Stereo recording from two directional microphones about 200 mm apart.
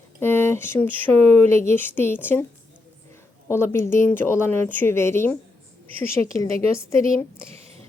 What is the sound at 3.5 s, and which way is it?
Speech, 10° left (ahead or behind).